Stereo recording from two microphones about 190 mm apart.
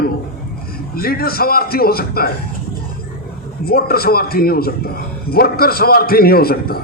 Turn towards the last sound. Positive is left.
turn(degrees=55)  # may be behind; listen again after turning